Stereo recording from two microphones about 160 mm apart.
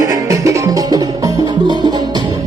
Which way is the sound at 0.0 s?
20° right (ahead or behind).